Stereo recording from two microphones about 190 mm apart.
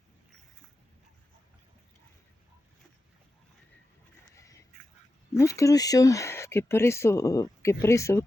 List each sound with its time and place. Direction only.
4.4 s duck: 15° left (ahead or behind)
5.3 s speech: 15° left (ahead or behind)